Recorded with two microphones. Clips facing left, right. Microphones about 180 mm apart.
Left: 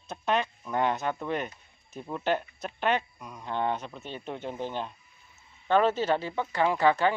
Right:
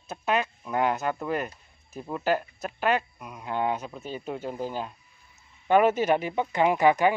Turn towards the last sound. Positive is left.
turn(degrees=-15)  # may be behind; listen again after turning